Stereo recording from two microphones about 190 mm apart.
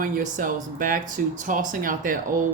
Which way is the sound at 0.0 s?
45° right (ahead or behind).